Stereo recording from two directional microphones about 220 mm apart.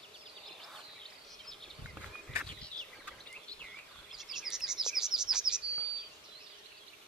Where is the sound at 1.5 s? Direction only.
5° right (ahead or behind).